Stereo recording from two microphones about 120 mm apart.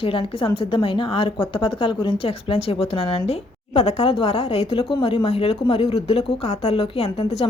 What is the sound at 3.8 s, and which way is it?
Speech, 60° left (ahead or behind).